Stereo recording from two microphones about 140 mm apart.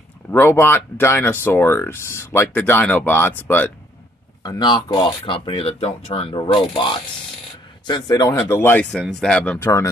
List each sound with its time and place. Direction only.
0.3 s speech: 15° left (ahead or behind)
4.4 s speech: 30° left (ahead or behind)
8.9 s speech: centre (ahead or behind)
9.6 s speech: 20° left (ahead or behind)